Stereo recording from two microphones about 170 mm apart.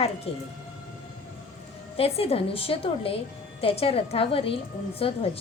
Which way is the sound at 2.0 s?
35° left (ahead or behind).